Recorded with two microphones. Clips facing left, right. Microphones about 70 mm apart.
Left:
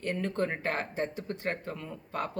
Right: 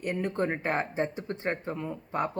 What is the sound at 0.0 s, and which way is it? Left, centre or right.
Speech, centre.